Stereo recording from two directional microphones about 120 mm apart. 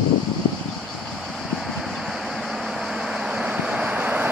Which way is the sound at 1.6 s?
Centre (ahead or behind).